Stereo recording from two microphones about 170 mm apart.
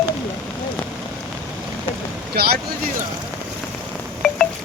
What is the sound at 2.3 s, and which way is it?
Speech, 65° right (ahead or behind).